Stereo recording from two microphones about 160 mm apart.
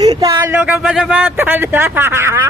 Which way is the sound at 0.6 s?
5° right (ahead or behind).